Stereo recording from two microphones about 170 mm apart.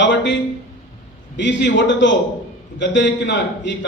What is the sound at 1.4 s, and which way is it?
A man's voice, 90° left.